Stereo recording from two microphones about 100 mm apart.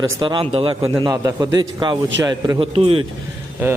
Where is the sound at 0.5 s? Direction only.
60° right (ahead or behind).